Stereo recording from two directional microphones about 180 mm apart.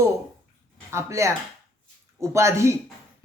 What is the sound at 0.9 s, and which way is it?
Speech, 15° right (ahead or behind).